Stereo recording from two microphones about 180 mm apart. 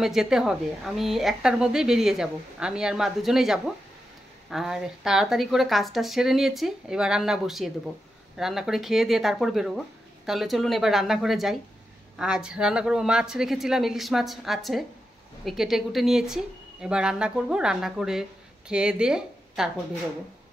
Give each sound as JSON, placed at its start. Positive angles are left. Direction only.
{"t": 0.0, "sound": "a woman's voice", "side_deg": 0}